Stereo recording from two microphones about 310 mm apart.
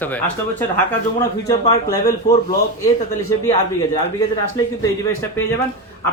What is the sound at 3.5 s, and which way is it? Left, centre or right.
Speech, left.